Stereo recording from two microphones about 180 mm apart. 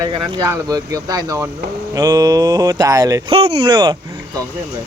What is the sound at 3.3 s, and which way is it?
Speech, 35° right (ahead or behind).